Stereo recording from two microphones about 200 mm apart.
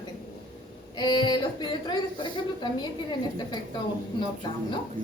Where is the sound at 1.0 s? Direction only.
20° left (ahead or behind).